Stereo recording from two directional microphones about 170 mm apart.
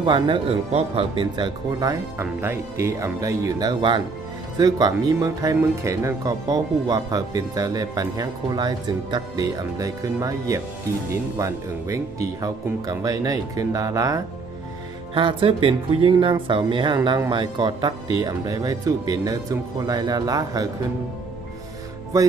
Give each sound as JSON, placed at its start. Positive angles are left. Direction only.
{"t": 0.0, "sound": "speech", "side_deg": -30}
{"t": 15.1, "sound": "speech", "side_deg": -30}